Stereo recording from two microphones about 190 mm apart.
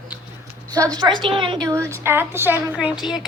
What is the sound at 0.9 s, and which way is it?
A woman's voice, 25° right (ahead or behind).